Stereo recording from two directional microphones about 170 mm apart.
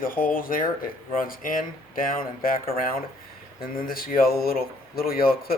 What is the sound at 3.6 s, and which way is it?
Speech, 60° left (ahead or behind).